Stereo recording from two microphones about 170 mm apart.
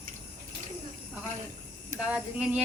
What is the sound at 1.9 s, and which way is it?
Speech, 5° right (ahead or behind).